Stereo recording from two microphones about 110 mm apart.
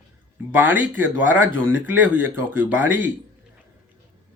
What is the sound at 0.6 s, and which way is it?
Speech, 15° right (ahead or behind).